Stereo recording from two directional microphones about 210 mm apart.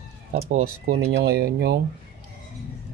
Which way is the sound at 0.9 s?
45° right (ahead or behind).